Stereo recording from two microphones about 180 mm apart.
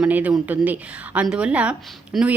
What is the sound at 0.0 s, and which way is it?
A woman's voice, 10° right (ahead or behind).